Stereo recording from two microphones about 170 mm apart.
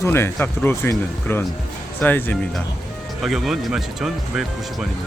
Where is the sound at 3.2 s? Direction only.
Centre (ahead or behind).